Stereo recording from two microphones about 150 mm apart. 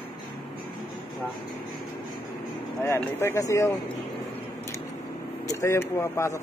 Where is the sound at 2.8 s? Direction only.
15° left (ahead or behind).